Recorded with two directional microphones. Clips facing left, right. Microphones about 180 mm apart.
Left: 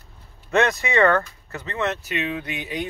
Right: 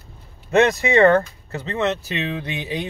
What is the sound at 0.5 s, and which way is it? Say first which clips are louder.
Speech: right 4 dB; 25° right (ahead or behind).